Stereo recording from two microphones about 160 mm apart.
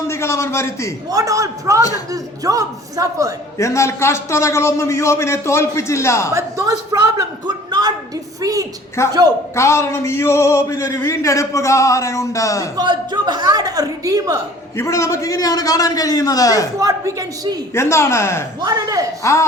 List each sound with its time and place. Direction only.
0.1 s a man's voice: 15° left (ahead or behind)
1.1 s a woman's voice: 20° right (ahead or behind)
3.6 s a man's voice: 20° left (ahead or behind)
6.3 s a woman's voice: 20° right (ahead or behind)
9.0 s a man's voice: 15° left (ahead or behind)
12.7 s a woman's voice: 25° right (ahead or behind)
14.8 s speech: 20° left (ahead or behind)
16.8 s a woman's voice: 20° right (ahead or behind)
17.7 s a man's voice: 15° left (ahead or behind)
18.6 s a woman's voice: 20° right (ahead or behind)
19.2 s speech: 20° left (ahead or behind)